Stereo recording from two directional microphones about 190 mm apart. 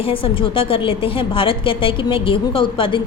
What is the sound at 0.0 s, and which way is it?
A woman's voice, 30° left (ahead or behind).